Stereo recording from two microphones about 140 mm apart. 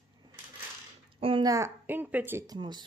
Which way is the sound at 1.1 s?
40° right (ahead or behind).